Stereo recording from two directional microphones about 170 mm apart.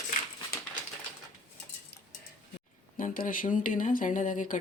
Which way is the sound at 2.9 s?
55° left (ahead or behind).